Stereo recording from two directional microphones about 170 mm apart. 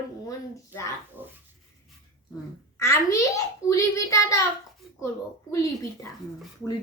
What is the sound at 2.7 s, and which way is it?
A child's voice, 15° left (ahead or behind).